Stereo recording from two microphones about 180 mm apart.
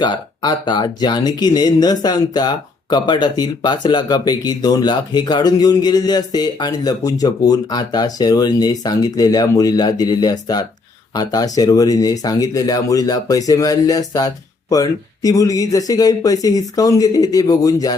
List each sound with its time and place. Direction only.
0.0 s speech: 25° left (ahead or behind)